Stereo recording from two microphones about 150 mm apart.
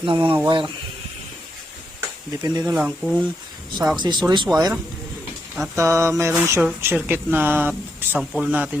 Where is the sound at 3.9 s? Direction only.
30° right (ahead or behind).